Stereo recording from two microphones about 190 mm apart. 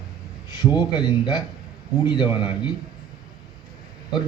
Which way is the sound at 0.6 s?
20° left (ahead or behind).